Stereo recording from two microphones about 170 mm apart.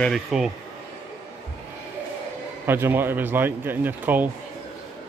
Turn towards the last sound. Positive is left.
turn(degrees=-10)  # may be behind; listen again after turning